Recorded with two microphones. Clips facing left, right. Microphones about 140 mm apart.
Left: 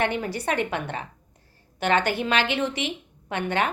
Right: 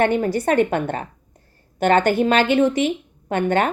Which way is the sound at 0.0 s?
45° right (ahead or behind).